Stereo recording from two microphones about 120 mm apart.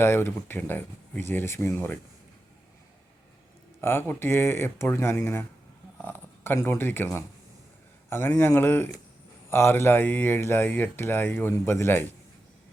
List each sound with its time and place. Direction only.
0.0 s speech: 20° left (ahead or behind)
3.8 s speech: 20° left (ahead or behind)